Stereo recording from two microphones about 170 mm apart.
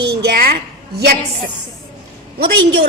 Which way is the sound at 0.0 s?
75° right (ahead or behind).